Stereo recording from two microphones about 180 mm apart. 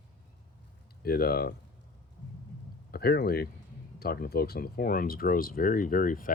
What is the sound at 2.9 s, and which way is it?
Speech, 55° left (ahead or behind).